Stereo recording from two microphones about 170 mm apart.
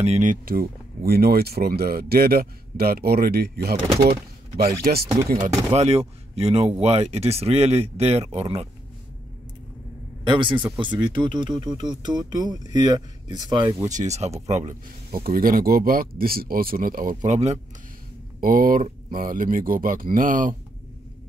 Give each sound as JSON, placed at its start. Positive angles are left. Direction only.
{"t": 0.0, "sound": "speech", "side_deg": -45}
{"t": 5.7, "sound": "speech", "side_deg": -40}
{"t": 10.2, "sound": "speech", "side_deg": -25}
{"t": 13.9, "sound": "speech", "side_deg": -40}
{"t": 17.2, "sound": "speech", "side_deg": -40}
{"t": 18.4, "sound": "speech", "side_deg": -55}